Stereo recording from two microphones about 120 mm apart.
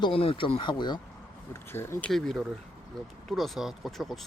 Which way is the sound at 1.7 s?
20° left (ahead or behind).